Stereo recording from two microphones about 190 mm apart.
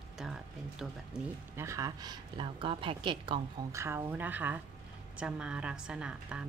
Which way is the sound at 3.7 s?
15° right (ahead or behind).